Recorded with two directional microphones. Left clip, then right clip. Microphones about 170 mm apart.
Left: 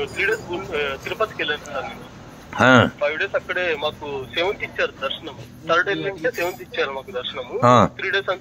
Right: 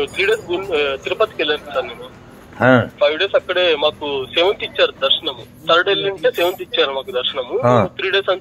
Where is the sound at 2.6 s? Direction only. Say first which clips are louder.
Right 1 dB; 20° left (ahead or behind).